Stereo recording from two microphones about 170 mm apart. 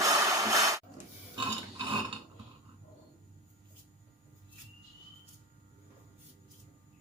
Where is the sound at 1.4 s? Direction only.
30° right (ahead or behind).